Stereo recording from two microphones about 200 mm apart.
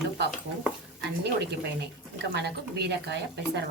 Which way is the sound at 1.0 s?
60° right (ahead or behind).